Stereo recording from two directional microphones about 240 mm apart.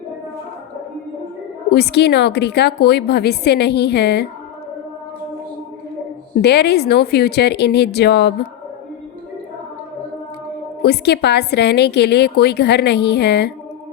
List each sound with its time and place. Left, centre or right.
1.7 s a woman's voice: left
6.4 s a woman's voice: left
10.8 s a woman's voice: left